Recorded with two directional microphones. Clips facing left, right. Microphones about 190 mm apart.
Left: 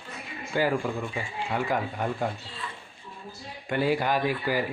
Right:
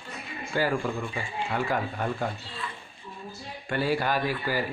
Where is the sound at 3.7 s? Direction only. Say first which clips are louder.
Left 1 dB; 15° left (ahead or behind).